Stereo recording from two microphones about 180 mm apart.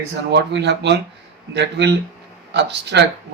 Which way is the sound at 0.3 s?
70° right (ahead or behind).